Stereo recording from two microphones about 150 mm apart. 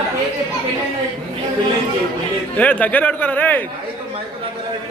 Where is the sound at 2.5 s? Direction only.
10° left (ahead or behind).